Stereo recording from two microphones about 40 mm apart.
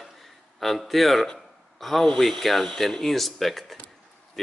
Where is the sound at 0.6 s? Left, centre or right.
Centre.